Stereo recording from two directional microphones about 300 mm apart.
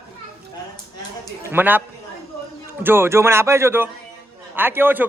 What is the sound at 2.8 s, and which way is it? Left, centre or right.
Speech, centre.